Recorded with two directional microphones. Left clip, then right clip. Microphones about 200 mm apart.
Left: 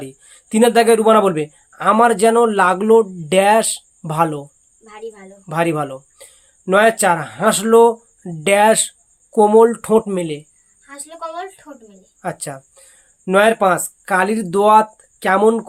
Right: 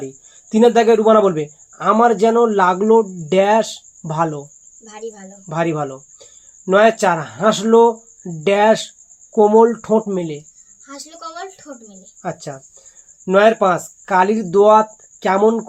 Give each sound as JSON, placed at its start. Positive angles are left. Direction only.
{"t": 0.5, "sound": "a man's voice", "side_deg": 35}
{"t": 4.9, "sound": "speech", "side_deg": 15}
{"t": 5.5, "sound": "a man's voice", "side_deg": 35}
{"t": 12.2, "sound": "a man's voice", "side_deg": 40}